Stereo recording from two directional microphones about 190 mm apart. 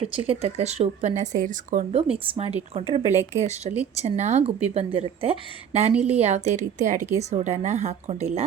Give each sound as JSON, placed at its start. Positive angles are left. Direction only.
{"t": 0.0, "sound": "speech", "side_deg": -30}
{"t": 5.9, "sound": "a woman's voice", "side_deg": -5}
{"t": 6.1, "sound": "speech", "side_deg": -35}